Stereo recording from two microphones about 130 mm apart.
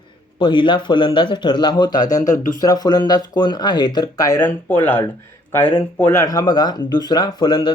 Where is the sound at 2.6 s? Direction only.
30° left (ahead or behind).